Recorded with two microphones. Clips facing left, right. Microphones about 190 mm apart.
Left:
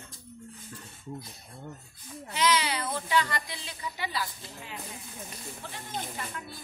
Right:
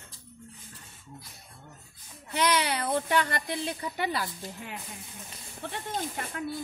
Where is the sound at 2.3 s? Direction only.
55° right (ahead or behind).